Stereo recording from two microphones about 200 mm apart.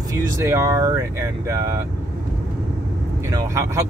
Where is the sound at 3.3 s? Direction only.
15° right (ahead or behind).